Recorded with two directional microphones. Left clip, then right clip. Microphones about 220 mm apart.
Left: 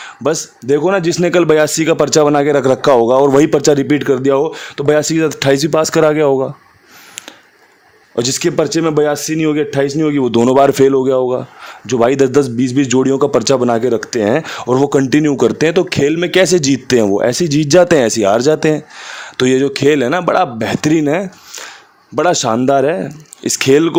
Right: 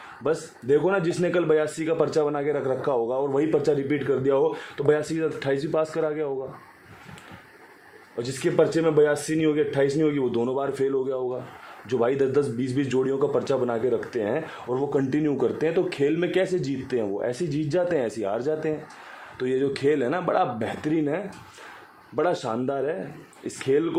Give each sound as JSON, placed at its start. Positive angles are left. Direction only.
{"t": 0.2, "sound": "speech", "side_deg": 50}
{"t": 8.1, "sound": "speech", "side_deg": 55}
{"t": 15.0, "sound": "speech", "side_deg": 40}